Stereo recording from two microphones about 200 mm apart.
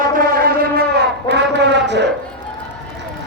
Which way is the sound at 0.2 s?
50° right (ahead or behind).